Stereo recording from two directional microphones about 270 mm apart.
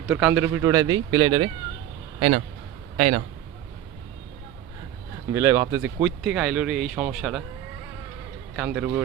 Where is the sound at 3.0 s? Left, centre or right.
Right.